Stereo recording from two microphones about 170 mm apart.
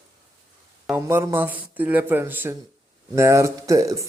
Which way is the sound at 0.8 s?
10° right (ahead or behind).